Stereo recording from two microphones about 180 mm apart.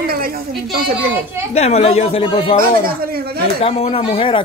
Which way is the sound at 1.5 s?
35° left (ahead or behind).